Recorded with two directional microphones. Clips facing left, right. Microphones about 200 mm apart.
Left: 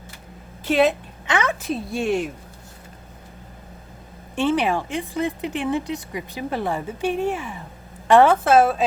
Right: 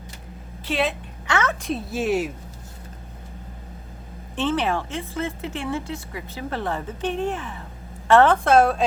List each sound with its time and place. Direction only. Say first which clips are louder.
0.6 s a woman's voice: left 6 dB; 45° left (ahead or behind)
1.3 s speech: left 1 dB; 15° left (ahead or behind)
1.6 s speech: left 1 dB; centre (ahead or behind)
4.4 s speech: left 3 dB; 10° left (ahead or behind)